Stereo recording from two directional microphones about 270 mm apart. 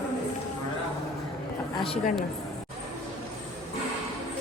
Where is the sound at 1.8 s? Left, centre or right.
Left.